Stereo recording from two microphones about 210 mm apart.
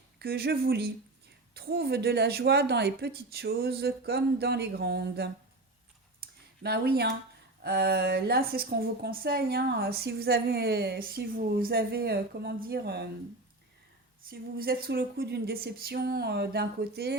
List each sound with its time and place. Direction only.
0.2 s speech: 45° right (ahead or behind)
6.2 s a sound: 45° right (ahead or behind)
6.6 s speech: 50° right (ahead or behind)
14.2 s speech: 45° right (ahead or behind)